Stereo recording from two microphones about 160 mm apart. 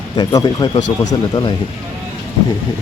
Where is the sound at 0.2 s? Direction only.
25° left (ahead or behind).